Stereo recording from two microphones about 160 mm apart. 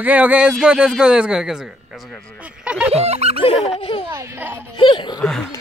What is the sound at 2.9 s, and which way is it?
Music, 40° right (ahead or behind).